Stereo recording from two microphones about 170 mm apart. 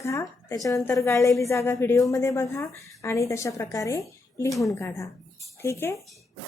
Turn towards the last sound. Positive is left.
turn(degrees=15)  # may be behind; listen again after turning